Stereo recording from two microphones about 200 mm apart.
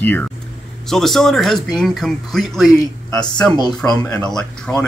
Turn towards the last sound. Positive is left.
turn(degrees=5)  # may be behind; listen again after turning